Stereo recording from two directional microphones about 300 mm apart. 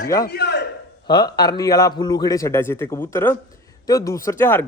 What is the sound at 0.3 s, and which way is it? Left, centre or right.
Speech, left.